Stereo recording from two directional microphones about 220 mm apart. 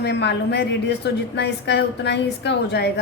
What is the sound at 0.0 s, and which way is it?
A woman's voice, 50° left (ahead or behind).